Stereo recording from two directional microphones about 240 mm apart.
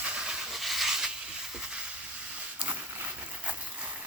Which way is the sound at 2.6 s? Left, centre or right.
Centre.